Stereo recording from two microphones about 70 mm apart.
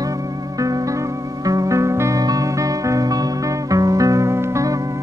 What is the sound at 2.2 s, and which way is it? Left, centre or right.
Music, right.